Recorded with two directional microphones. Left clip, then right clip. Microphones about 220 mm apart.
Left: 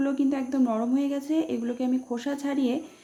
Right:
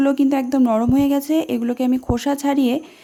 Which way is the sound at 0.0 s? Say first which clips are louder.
Right 9 dB; 50° right (ahead or behind).